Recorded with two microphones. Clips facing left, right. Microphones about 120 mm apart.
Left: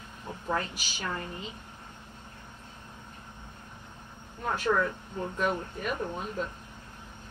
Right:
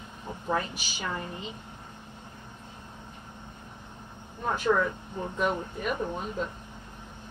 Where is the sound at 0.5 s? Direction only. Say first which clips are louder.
Right 2 dB; 10° right (ahead or behind).